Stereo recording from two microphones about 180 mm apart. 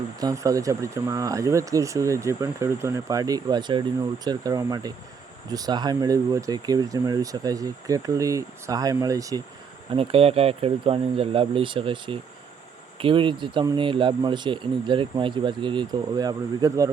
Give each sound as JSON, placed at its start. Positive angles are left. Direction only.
{"t": 0.2, "sound": "speech", "side_deg": -20}
{"t": 9.9, "sound": "speech", "side_deg": -30}